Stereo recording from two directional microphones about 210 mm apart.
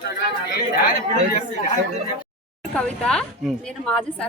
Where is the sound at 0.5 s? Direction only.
45° left (ahead or behind).